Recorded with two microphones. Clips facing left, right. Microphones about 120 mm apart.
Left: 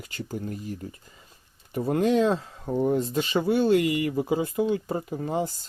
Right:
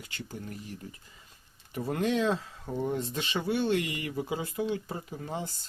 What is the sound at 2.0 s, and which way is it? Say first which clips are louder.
Speech: left 5 dB; 40° left (ahead or behind).